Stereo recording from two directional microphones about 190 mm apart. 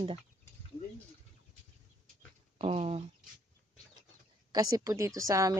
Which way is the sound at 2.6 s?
30° right (ahead or behind).